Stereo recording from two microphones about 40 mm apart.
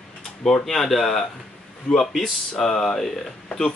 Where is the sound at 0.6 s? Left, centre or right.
Centre.